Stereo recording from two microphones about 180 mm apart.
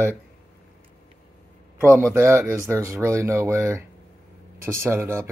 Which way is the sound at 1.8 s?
15° right (ahead or behind).